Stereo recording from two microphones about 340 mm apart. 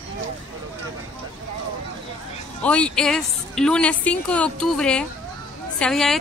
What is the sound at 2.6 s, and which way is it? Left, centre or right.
A woman's voice, centre.